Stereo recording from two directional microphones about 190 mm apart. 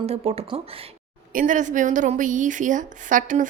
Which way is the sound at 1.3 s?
45° right (ahead or behind).